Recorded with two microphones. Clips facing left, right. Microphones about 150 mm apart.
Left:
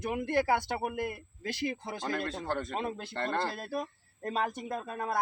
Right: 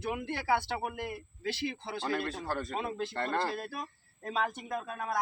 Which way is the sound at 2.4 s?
20° left (ahead or behind).